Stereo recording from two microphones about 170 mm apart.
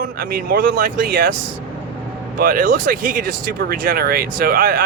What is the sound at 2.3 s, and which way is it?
Speech, 55° right (ahead or behind).